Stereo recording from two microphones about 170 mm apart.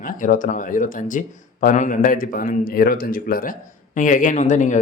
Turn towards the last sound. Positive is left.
turn(degrees=45)  # may be behind; listen again after turning